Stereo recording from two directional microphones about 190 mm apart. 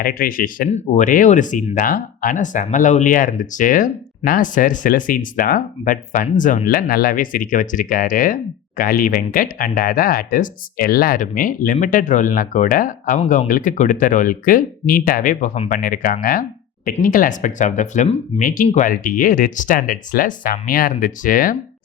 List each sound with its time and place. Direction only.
0.0 s speech: 50° left (ahead or behind)
0.7 s speech: 35° left (ahead or behind)
15.7 s speech: 50° left (ahead or behind)